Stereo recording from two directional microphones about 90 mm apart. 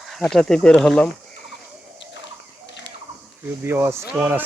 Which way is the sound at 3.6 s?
25° right (ahead or behind).